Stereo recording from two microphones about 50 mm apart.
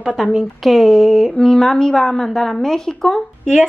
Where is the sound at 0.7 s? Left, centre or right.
Centre.